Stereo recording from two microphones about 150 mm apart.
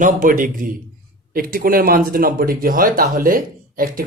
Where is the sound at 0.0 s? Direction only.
60° right (ahead or behind).